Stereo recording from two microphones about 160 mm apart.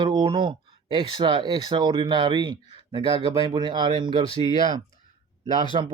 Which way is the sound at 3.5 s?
30° right (ahead or behind).